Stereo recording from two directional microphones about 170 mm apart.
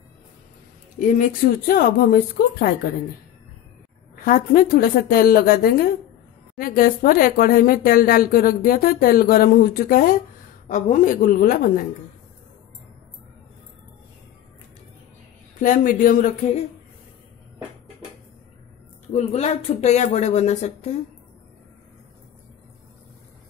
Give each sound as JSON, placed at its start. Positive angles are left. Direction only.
{"t": 0.9, "sound": "speech", "side_deg": 50}
{"t": 4.2, "sound": "a woman's voice", "side_deg": 55}
{"t": 15.6, "sound": "a woman's voice", "side_deg": 55}
{"t": 19.1, "sound": "speech", "side_deg": 40}